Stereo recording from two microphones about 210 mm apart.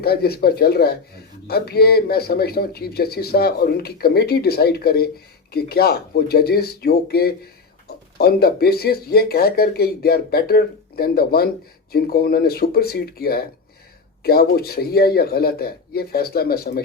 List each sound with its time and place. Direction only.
0.0 s speech: 50° left (ahead or behind)